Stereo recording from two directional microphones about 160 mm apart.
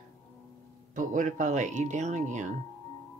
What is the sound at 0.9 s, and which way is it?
Speech, 50° right (ahead or behind).